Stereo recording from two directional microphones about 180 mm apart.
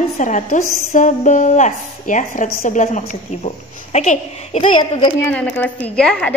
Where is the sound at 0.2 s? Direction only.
45° left (ahead or behind).